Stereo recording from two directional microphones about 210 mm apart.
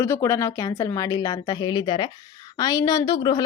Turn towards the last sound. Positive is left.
turn(degrees=20)  # may be behind; listen again after turning